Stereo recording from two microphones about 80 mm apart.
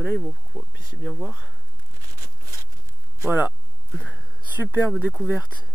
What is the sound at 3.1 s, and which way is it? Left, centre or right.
Speech, right.